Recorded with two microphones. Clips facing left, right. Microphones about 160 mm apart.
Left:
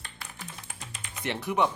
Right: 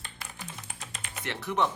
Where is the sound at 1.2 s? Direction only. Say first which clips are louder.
Left 2 dB; 15° left (ahead or behind).